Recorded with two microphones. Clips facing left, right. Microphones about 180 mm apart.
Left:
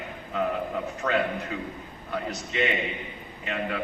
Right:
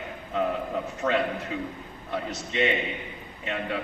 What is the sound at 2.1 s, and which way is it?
Speech, 30° right (ahead or behind).